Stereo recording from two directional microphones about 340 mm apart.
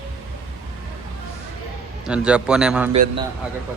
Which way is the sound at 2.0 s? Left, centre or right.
Centre.